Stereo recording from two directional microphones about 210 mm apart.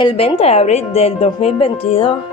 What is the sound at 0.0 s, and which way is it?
Speech, 30° left (ahead or behind).